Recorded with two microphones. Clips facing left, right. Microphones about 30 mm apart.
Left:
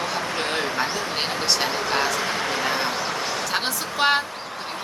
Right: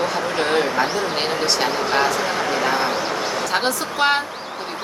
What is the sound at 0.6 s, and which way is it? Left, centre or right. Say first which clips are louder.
Speech: right 4 dB; centre.